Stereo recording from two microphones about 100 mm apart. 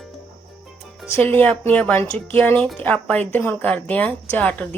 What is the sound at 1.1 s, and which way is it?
A woman's voice, 15° left (ahead or behind).